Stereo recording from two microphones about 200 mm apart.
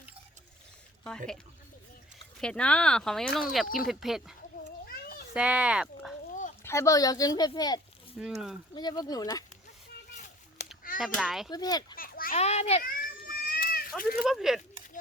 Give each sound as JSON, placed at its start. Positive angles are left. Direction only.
{"t": 2.4, "sound": "speech", "side_deg": 5}
{"t": 4.9, "sound": "cat", "side_deg": 45}
{"t": 5.3, "sound": "speech", "side_deg": -5}
{"t": 6.6, "sound": "speech", "side_deg": 15}
{"t": 8.2, "sound": "speech", "side_deg": 0}
{"t": 8.7, "sound": "speech", "side_deg": 20}
{"t": 11.0, "sound": "speech", "side_deg": 0}
{"t": 11.5, "sound": "speech", "side_deg": 20}
{"t": 11.9, "sound": "children playing", "side_deg": 45}
{"t": 12.3, "sound": "a child's voice", "side_deg": 30}
{"t": 12.8, "sound": "a sound", "side_deg": 45}
{"t": 14.2, "sound": "speech", "side_deg": 0}